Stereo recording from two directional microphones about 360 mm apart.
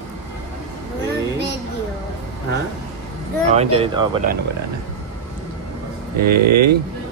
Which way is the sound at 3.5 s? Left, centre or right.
Centre.